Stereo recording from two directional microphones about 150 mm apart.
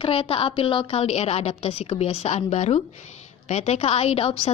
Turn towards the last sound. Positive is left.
turn(degrees=40)  # may be behind; listen again after turning